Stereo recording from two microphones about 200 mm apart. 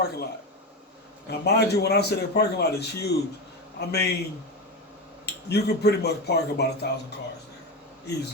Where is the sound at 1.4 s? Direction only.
55° left (ahead or behind).